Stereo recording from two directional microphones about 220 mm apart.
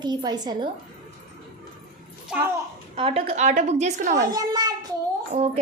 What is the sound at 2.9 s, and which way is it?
A woman's voice, 25° right (ahead or behind).